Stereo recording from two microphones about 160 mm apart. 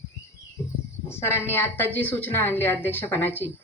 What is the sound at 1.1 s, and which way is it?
A woman's voice, 15° left (ahead or behind).